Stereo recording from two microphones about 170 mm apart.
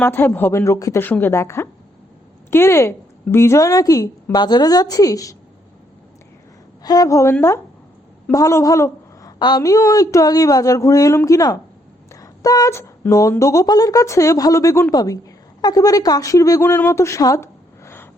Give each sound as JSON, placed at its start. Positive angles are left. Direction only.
{"t": 0.0, "sound": "a woman's voice", "side_deg": 10}
{"t": 6.8, "sound": "a woman's voice", "side_deg": 20}